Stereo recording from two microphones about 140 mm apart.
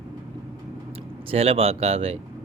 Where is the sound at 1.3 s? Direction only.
45° right (ahead or behind).